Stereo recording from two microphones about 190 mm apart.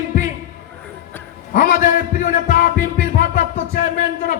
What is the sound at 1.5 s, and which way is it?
A man's voice, 45° left (ahead or behind).